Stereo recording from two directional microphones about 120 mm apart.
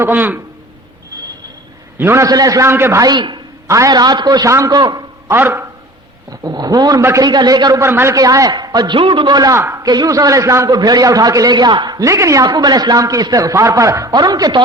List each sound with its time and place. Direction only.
0.0 s a man's voice: 15° right (ahead or behind)
2.0 s a man's voice: 20° right (ahead or behind); by 3.4 s 40° right (ahead or behind)
3.7 s a man's voice: 30° right (ahead or behind)
5.3 s a man's voice: 20° right (ahead or behind)
6.3 s a man's voice: 35° right (ahead or behind)
7.3 s a man's voice: 35° right (ahead or behind)
9.0 s a man's voice: 45° right (ahead or behind)
9.6 s a man's voice: 25° right (ahead or behind)